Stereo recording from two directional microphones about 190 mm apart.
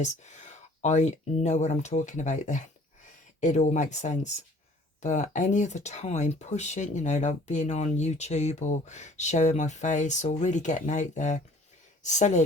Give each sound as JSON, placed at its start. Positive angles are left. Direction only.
{"t": 0.0, "sound": "speech", "side_deg": 40}